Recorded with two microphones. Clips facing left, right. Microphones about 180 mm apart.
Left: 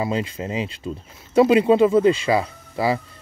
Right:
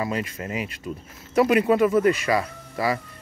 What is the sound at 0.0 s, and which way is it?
Speech, 25° left (ahead or behind).